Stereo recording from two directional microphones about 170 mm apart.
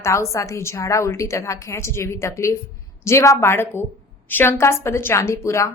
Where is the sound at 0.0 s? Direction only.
15° left (ahead or behind).